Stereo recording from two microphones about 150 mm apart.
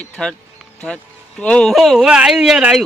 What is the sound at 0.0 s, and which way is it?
Speech, 5° left (ahead or behind).